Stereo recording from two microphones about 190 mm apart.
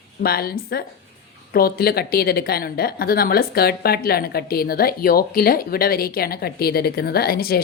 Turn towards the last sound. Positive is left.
turn(degrees=50)  # may be behind; listen again after turning